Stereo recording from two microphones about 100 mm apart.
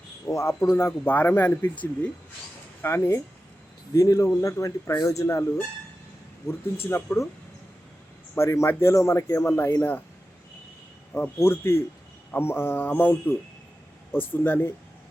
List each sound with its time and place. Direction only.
0.3 s speech: 30° left (ahead or behind)
2.8 s speech: 25° left (ahead or behind)
6.8 s speech: 25° left (ahead or behind)
8.4 s speech: 25° left (ahead or behind)
11.1 s speech: 25° left (ahead or behind)